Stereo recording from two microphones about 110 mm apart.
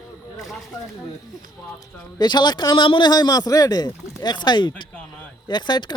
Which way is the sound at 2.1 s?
40° left (ahead or behind).